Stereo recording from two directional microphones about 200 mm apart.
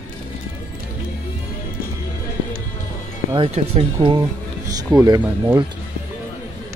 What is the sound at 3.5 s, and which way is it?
Speech, 30° right (ahead or behind).